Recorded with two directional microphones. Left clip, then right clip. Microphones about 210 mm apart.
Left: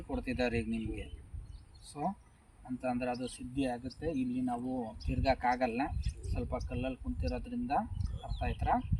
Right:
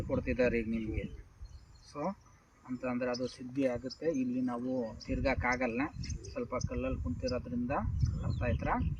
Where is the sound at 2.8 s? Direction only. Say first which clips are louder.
Right 1 dB; 35° left (ahead or behind).